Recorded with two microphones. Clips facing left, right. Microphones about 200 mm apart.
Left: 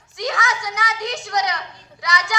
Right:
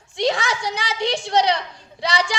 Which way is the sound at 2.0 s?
30° right (ahead or behind).